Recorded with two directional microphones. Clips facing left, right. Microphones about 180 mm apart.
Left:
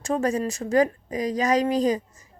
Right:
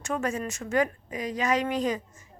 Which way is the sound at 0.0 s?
35° left (ahead or behind).